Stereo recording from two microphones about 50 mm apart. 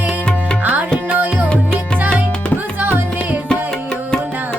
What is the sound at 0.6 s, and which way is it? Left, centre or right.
Music, right.